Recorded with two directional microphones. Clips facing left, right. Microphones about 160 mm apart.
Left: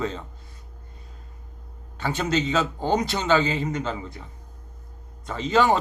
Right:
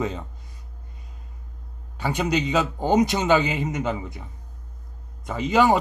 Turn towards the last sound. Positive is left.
turn(degrees=-10)  # may be behind; listen again after turning